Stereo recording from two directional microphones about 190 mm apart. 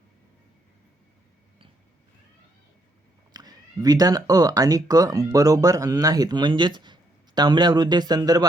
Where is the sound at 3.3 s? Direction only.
20° right (ahead or behind).